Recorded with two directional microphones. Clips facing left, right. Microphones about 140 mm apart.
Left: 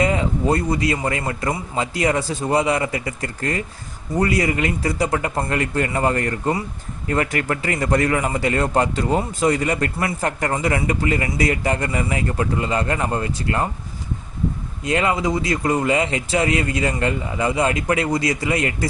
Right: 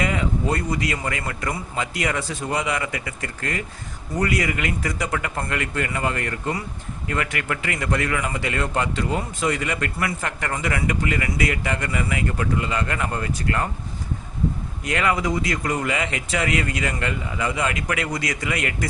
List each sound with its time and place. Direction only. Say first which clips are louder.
0.0 s a man's voice: left 4 dB; 30° left (ahead or behind)
14.8 s a man's voice: left 3 dB; 30° left (ahead or behind)